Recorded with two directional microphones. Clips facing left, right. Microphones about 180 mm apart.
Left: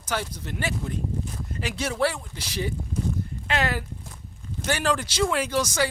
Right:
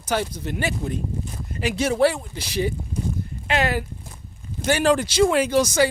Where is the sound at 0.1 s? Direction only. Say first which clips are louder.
Right 6 dB; 15° right (ahead or behind).